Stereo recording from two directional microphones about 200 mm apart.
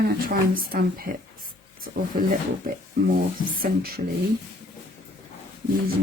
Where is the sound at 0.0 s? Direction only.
50° right (ahead or behind).